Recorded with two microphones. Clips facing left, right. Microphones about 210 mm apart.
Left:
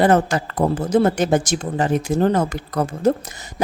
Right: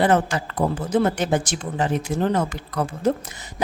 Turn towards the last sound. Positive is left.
turn(degrees=45)  # may be behind; listen again after turning